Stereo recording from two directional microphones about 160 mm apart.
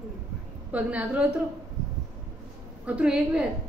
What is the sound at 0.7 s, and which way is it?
Speech, 10° right (ahead or behind).